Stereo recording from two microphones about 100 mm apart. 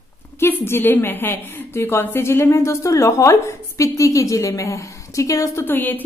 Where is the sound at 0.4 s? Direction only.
20° left (ahead or behind).